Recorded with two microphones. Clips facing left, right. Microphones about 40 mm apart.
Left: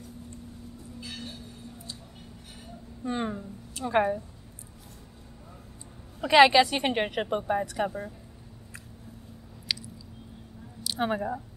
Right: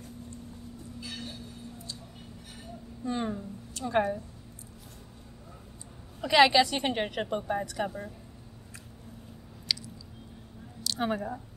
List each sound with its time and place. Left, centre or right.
1.0 s train: centre
3.0 s a woman's voice: left
6.2 s a woman's voice: centre
9.7 s chewing: centre
10.8 s speech: centre